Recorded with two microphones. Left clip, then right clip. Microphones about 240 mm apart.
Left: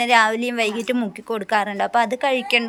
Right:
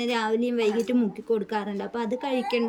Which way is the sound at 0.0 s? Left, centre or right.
Centre.